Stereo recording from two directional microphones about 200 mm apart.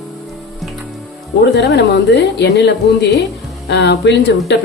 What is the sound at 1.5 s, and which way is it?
A woman's voice, 60° left (ahead or behind).